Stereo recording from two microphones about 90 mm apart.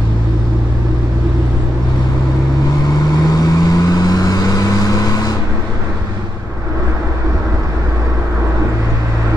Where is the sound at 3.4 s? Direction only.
45° left (ahead or behind).